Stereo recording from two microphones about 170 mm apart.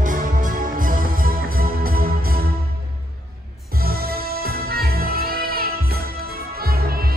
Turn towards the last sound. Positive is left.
turn(degrees=-65)  # may be behind; listen again after turning